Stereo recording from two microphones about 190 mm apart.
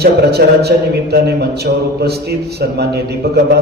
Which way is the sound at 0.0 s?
60° right (ahead or behind).